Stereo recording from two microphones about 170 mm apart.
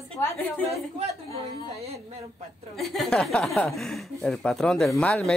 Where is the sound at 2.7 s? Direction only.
Centre (ahead or behind).